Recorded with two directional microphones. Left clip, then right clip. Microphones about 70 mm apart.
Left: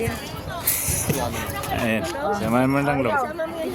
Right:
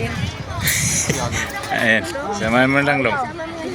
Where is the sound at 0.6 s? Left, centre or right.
Centre.